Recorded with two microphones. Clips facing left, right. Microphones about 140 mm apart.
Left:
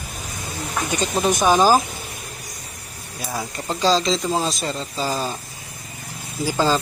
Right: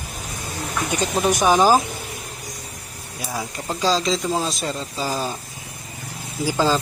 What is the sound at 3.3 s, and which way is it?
Speech, centre (ahead or behind).